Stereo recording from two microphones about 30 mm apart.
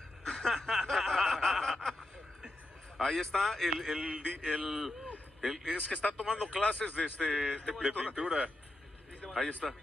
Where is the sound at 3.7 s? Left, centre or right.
Right.